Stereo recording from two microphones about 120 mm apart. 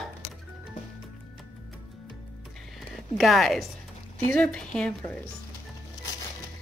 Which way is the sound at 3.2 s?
Centre (ahead or behind).